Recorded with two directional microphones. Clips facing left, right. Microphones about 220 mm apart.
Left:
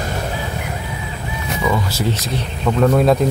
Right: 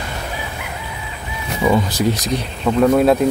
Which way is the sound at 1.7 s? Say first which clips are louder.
Right 5 dB; 15° right (ahead or behind).